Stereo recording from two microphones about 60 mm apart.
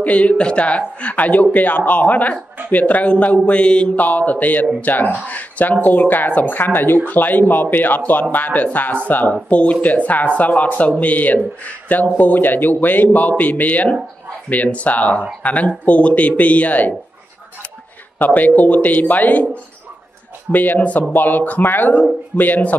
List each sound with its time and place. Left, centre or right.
0.0 s speech: left
18.2 s speech: left
20.5 s speech: left